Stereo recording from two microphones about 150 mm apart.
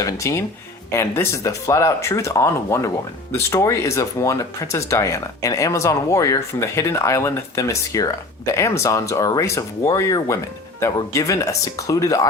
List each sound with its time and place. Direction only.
0.0 s speech: 20° left (ahead or behind)